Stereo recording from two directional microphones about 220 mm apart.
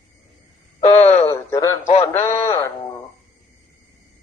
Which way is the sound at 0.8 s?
30° left (ahead or behind).